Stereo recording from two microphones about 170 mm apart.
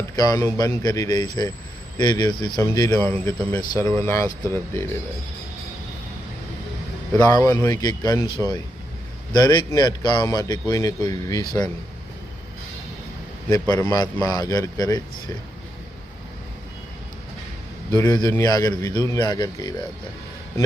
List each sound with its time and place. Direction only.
0.2 s speech: 20° left (ahead or behind)
7.2 s speech: 20° left (ahead or behind)
13.5 s speech: 20° left (ahead or behind)
17.9 s speech: 20° left (ahead or behind)